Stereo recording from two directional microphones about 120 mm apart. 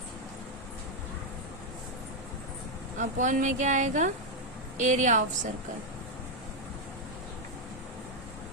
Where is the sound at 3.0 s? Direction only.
90° right.